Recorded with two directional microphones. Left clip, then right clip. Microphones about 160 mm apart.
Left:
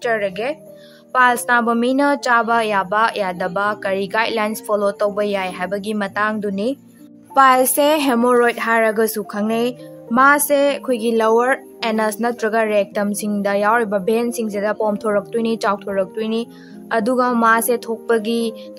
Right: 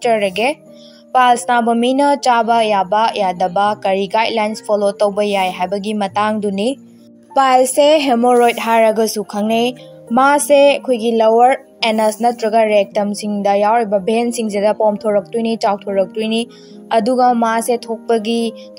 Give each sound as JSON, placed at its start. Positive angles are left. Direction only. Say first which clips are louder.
{"t": 0.0, "sound": "a woman's voice", "louder": "right 5 dB", "side_deg": -15}
{"t": 5.9, "sound": "a woman's voice", "louder": "right 4 dB", "side_deg": -10}
{"t": 7.3, "sound": "a woman's voice", "louder": "right 1 dB", "side_deg": 0}
{"t": 9.5, "sound": "speech", "louder": "right 4 dB", "side_deg": 35}
{"t": 10.1, "sound": "a woman's voice", "louder": "right 3 dB", "side_deg": -5}
{"t": 11.0, "sound": "a woman's voice", "louder": "right 3 dB", "side_deg": 0}
{"t": 14.1, "sound": "a woman's voice", "louder": "right 3 dB", "side_deg": -10}
{"t": 14.8, "sound": "a woman's voice", "louder": "right 4 dB", "side_deg": 0}